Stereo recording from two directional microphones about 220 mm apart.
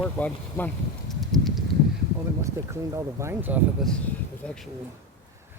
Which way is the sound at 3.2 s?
10° right (ahead or behind).